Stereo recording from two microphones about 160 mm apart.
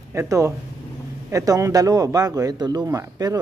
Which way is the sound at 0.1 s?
20° right (ahead or behind).